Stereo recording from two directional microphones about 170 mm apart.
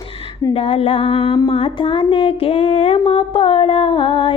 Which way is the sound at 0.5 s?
35° left (ahead or behind).